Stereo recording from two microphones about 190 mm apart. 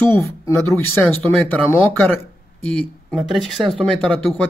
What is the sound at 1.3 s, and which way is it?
Speech, 5° left (ahead or behind).